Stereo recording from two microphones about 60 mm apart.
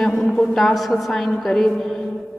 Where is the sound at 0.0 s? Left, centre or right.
Centre.